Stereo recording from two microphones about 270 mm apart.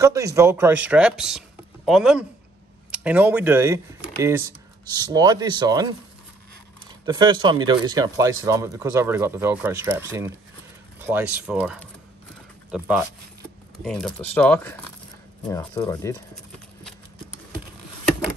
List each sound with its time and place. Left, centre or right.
0.0 s speech: centre
7.1 s speech: centre